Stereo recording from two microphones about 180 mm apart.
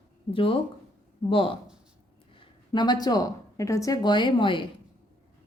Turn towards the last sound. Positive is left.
turn(degrees=30)  # may be behind; listen again after turning